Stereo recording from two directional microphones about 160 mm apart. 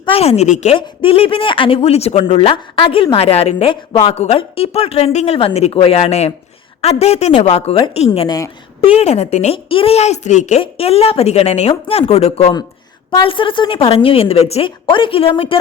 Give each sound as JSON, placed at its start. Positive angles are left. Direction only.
{"t": 0.0, "sound": "speech", "side_deg": 35}
{"t": 0.8, "sound": "speech", "side_deg": 35}
{"t": 10.6, "sound": "speech", "side_deg": 35}